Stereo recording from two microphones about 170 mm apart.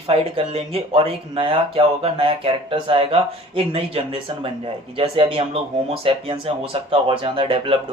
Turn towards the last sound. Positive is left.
turn(degrees=-30)  # may be behind; listen again after turning